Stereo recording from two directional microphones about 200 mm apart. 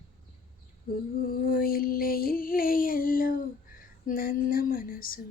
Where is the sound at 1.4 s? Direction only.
45° left (ahead or behind).